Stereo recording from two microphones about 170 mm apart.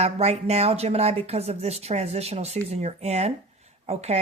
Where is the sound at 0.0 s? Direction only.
40° right (ahead or behind).